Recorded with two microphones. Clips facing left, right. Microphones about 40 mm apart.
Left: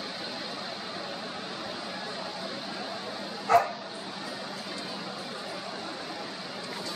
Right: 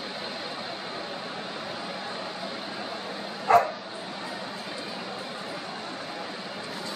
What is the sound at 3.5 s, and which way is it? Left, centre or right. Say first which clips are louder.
Bow-wow: right 3 dB; right.